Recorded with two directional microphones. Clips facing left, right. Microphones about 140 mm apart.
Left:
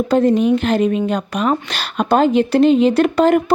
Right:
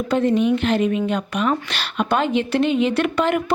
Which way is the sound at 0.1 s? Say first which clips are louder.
Left 3 dB; 40° left (ahead or behind).